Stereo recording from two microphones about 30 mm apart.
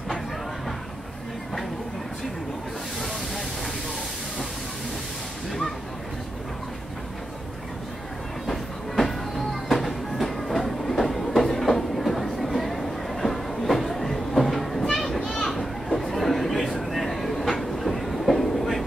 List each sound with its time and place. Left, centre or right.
8.5 s train: centre
15.1 s children playing: left
15.4 s a sound: centre